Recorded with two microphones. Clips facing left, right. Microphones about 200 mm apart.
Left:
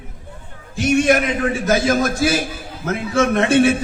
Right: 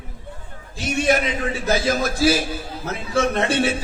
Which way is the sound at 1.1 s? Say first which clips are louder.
Left 4 dB; 55° left (ahead or behind).